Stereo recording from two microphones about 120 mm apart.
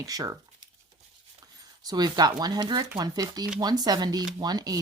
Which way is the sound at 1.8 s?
35° right (ahead or behind).